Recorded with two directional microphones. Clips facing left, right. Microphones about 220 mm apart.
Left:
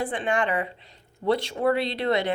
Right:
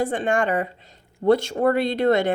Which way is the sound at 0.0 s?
45° right (ahead or behind).